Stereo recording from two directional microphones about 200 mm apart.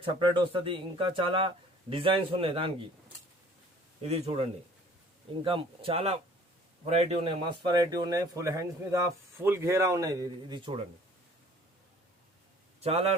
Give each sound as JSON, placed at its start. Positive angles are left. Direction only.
{"t": 0.0, "sound": "speech", "side_deg": -25}
{"t": 4.0, "sound": "speech", "side_deg": -30}
{"t": 12.8, "sound": "speech", "side_deg": -30}